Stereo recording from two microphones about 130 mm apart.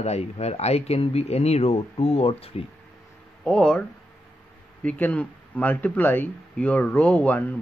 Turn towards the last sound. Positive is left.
turn(degrees=10)  # may be behind; listen again after turning